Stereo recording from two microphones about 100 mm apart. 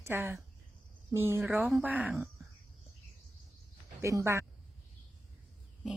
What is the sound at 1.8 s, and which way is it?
Speech, 15° right (ahead or behind).